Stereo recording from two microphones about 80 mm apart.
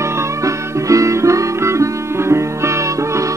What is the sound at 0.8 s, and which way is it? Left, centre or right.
Music, right.